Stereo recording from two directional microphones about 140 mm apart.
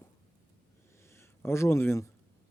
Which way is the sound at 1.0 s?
20° left (ahead or behind).